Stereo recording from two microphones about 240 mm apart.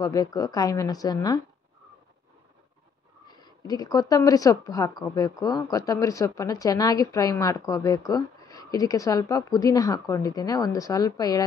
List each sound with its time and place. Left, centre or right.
0.0 s a woman's voice: centre
3.3 s a woman's voice: centre